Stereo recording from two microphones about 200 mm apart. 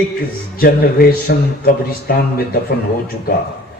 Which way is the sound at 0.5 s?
50° left (ahead or behind).